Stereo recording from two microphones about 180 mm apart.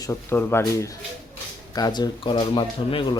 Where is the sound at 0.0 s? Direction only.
15° left (ahead or behind).